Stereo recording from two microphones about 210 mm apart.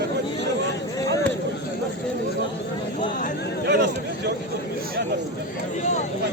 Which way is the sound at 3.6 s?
50° right (ahead or behind).